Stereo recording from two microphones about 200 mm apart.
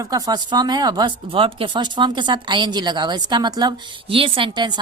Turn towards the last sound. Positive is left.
turn(degrees=-20)  # may be behind; listen again after turning